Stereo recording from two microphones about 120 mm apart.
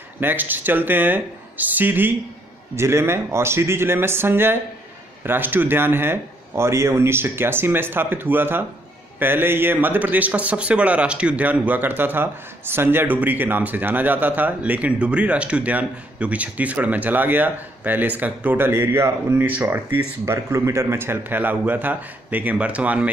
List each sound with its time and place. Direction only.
0.2 s a man's voice: 15° right (ahead or behind)